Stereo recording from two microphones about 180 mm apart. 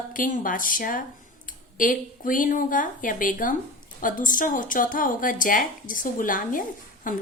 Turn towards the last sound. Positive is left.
turn(degrees=50)  # may be behind; listen again after turning